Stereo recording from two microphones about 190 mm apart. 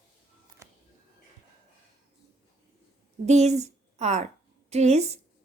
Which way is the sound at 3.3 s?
35° right (ahead or behind).